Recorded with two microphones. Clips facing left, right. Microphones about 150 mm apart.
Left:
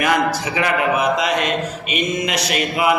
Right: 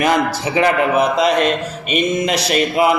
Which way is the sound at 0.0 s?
30° right (ahead or behind).